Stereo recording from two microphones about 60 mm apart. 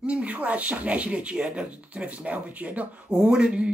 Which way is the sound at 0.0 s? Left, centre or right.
Centre.